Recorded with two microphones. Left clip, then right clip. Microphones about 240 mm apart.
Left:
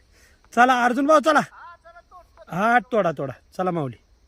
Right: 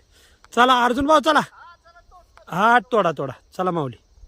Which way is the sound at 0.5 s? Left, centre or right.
Centre.